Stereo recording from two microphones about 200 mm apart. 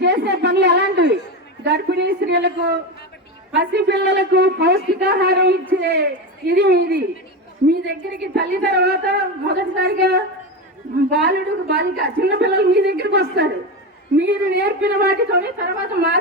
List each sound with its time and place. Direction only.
0.0 s a sound: 60° right (ahead or behind)
1.6 s a woman's voice: 55° right (ahead or behind)
8.4 s a woman's voice: 55° right (ahead or behind)